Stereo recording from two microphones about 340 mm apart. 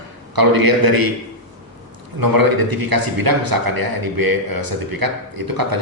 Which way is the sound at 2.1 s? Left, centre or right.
Right.